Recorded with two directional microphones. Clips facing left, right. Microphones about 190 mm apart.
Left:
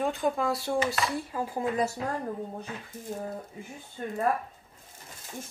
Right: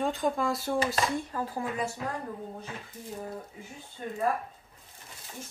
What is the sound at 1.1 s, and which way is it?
Speech, 10° left (ahead or behind).